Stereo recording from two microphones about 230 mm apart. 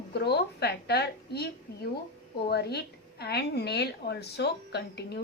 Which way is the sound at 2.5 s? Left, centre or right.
Left.